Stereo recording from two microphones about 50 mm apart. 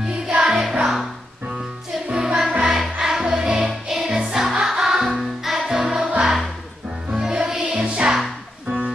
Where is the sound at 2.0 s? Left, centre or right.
Centre.